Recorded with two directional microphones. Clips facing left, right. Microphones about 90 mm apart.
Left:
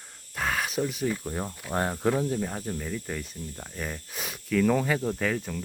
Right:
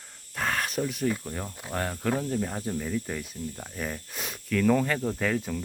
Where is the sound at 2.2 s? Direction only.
5° left (ahead or behind).